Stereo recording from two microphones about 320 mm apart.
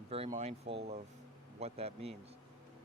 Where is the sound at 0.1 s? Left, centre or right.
Centre.